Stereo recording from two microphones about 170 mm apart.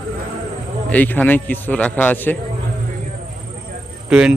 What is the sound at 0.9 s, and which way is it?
A man's voice, 10° left (ahead or behind).